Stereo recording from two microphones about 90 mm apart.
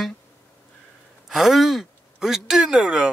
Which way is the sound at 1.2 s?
5° right (ahead or behind).